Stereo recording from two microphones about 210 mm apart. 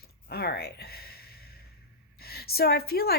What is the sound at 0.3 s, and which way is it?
Speech, 50° left (ahead or behind).